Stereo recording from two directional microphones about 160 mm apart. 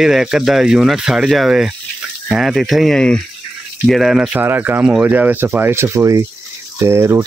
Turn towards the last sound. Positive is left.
turn(degrees=-15)  # may be behind; listen again after turning